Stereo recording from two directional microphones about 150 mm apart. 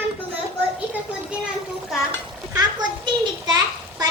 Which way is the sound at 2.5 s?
30° right (ahead or behind).